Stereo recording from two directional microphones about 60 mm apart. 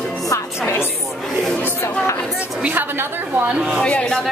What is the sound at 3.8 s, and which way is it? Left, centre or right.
Speech, centre.